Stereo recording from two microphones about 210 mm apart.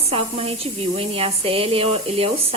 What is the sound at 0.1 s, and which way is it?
Speech, 30° right (ahead or behind).